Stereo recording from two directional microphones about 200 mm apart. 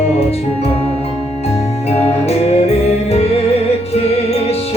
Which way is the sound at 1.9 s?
30° left (ahead or behind).